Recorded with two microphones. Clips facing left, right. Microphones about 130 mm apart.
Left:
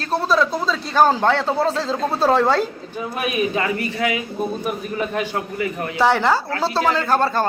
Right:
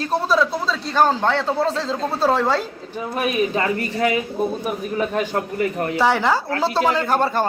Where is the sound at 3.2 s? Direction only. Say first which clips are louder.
Right 1 dB; 35° right (ahead or behind).